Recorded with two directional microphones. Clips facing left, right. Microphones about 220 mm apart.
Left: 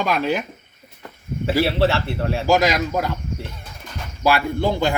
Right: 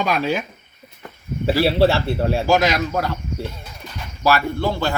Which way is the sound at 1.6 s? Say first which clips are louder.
Right 3 dB; 30° right (ahead or behind).